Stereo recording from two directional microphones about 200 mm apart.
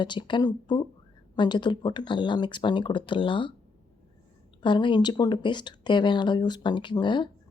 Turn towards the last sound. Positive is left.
turn(degrees=25)  # may be behind; listen again after turning